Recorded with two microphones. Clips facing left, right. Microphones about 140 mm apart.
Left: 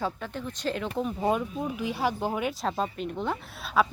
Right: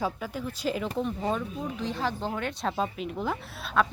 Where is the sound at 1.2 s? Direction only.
15° left (ahead or behind).